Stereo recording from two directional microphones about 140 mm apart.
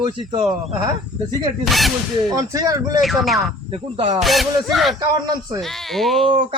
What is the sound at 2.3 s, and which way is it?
Speech, 25° right (ahead or behind).